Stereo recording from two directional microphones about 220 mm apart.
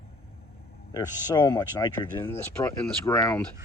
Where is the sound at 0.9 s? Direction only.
20° left (ahead or behind).